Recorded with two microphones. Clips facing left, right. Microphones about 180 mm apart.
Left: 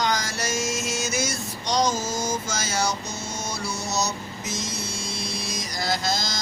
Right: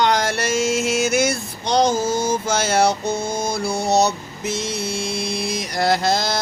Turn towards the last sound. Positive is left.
turn(degrees=-60)  # may be behind; listen again after turning